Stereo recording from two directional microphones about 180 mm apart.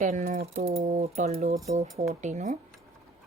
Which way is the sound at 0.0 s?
45° right (ahead or behind).